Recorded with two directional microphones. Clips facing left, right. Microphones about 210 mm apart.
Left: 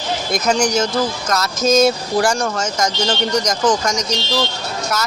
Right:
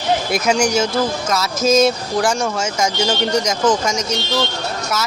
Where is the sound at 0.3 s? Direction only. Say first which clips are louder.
Left 3 dB; 10° right (ahead or behind).